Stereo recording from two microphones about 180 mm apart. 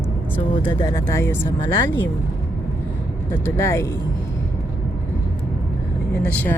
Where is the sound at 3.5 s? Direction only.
15° left (ahead or behind).